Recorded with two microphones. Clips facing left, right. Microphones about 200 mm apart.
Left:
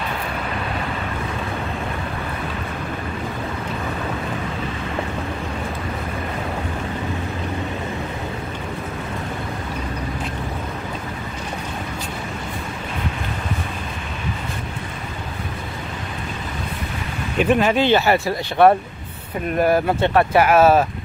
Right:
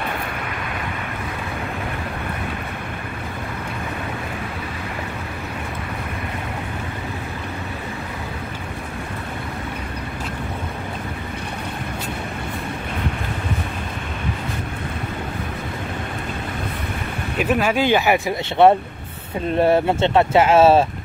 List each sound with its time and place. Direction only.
17.4 s speech: 5° right (ahead or behind); by 20.8 s 25° right (ahead or behind)